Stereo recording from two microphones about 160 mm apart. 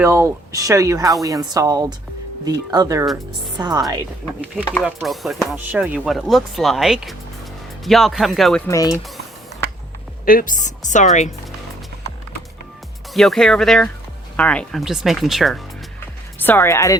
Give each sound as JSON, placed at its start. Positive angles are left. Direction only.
{"t": 0.0, "sound": "speech", "side_deg": -20}
{"t": 5.0, "sound": "speech", "side_deg": 0}
{"t": 8.6, "sound": "speech", "side_deg": 20}
{"t": 10.2, "sound": "a woman's voice", "side_deg": 60}
{"t": 13.1, "sound": "speech", "side_deg": 0}
{"t": 16.4, "sound": "speech", "side_deg": 15}